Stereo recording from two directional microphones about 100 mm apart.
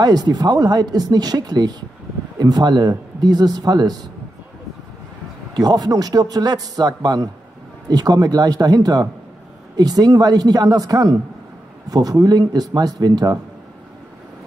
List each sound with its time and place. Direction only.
0.0 s speech: 40° right (ahead or behind)
5.5 s speech: 40° right (ahead or behind)